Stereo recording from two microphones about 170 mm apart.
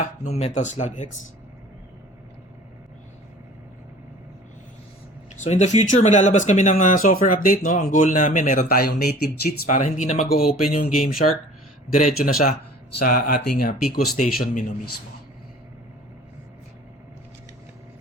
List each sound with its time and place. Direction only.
0.0 s speech: 40° left (ahead or behind)
5.4 s speech: 45° left (ahead or behind)
8.7 s speech: 65° left (ahead or behind)
9.6 s speech: 45° left (ahead or behind)
10.2 s speech: 60° left (ahead or behind)
10.9 s speech: centre (ahead or behind)
11.9 s speech: 50° left (ahead or behind)